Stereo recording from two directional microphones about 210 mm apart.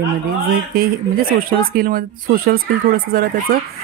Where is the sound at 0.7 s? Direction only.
45° right (ahead or behind).